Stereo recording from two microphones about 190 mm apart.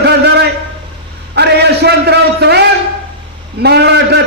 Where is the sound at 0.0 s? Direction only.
60° right (ahead or behind).